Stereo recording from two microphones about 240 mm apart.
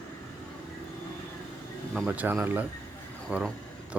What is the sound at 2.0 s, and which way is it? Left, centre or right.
A man's voice, centre.